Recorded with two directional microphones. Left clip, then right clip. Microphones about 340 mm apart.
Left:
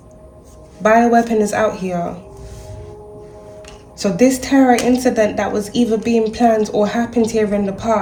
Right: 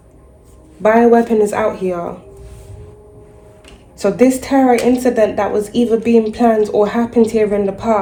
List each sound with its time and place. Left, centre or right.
0.8 s a woman's voice: centre
3.9 s a woman's voice: centre